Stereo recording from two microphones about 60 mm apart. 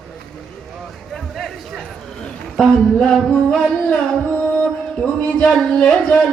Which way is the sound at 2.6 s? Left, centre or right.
Centre.